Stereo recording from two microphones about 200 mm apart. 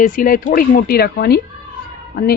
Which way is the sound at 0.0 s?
40° left (ahead or behind).